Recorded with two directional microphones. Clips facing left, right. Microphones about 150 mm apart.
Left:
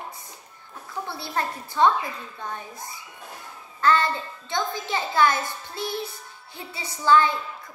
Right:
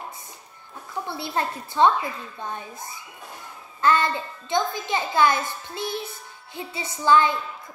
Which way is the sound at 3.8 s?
20° right (ahead or behind).